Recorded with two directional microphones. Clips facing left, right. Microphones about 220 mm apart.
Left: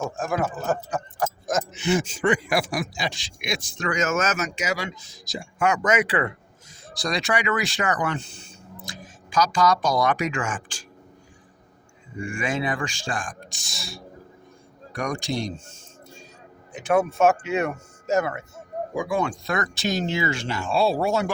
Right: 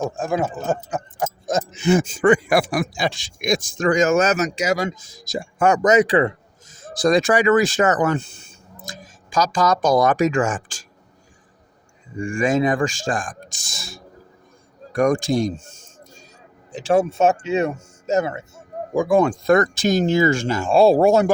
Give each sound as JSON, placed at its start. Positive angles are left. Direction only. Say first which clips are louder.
{"t": 0.2, "sound": "speech", "louder": "right 3 dB", "side_deg": -25}
{"t": 2.5, "sound": "a man's voice", "louder": "right 6 dB", "side_deg": -55}
{"t": 12.1, "sound": "a man's voice", "louder": "right 8 dB", "side_deg": -40}
{"t": 16.7, "sound": "speech", "louder": "right 3 dB", "side_deg": -30}
{"t": 18.9, "sound": "a man's voice", "louder": "right 9 dB", "side_deg": -45}